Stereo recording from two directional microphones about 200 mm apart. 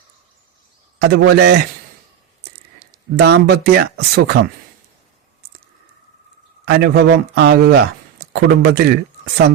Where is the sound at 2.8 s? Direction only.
55° right (ahead or behind).